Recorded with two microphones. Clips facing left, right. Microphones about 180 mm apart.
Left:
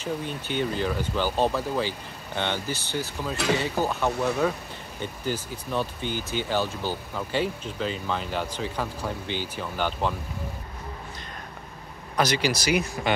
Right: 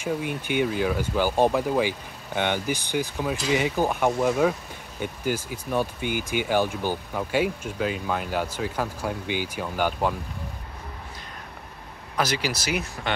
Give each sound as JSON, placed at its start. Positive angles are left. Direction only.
{"t": 0.0, "sound": "speech", "side_deg": -10}
{"t": 12.2, "sound": "speech", "side_deg": -5}